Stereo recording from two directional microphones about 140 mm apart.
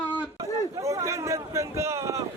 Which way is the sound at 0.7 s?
20° right (ahead or behind).